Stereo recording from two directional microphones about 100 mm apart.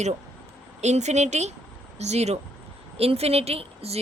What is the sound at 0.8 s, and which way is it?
A woman's voice, 90° right.